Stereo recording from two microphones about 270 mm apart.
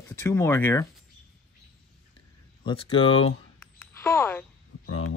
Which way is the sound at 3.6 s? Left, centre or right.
Centre.